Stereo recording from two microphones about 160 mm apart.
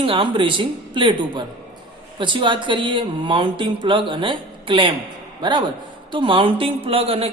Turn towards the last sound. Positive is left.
turn(degrees=-35)  # may be behind; listen again after turning